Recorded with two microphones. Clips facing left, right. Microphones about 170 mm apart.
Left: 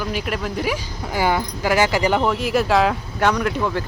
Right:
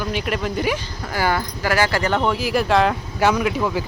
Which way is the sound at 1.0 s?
15° left (ahead or behind).